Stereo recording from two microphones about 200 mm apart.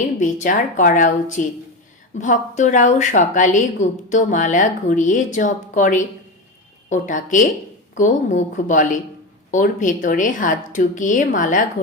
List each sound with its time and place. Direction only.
0.2 s a woman's voice: 40° left (ahead or behind)